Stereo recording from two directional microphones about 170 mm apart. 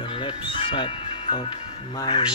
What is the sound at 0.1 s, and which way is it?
Music, 30° left (ahead or behind).